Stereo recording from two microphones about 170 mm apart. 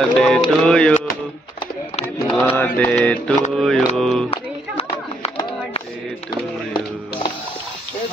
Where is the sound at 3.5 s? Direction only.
5° left (ahead or behind).